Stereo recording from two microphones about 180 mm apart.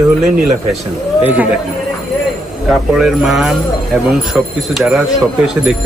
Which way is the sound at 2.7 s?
Centre (ahead or behind).